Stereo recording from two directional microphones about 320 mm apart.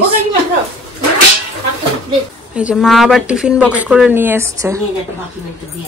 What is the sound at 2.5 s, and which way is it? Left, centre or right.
Speech, centre.